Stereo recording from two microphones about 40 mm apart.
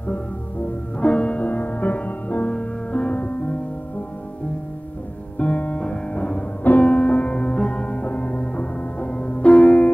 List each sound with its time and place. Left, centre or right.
0.0 s music: left
1.0 s music: left
5.4 s music: left